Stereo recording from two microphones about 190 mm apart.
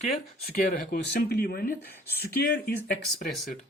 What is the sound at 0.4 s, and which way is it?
Speech, 55° left (ahead or behind).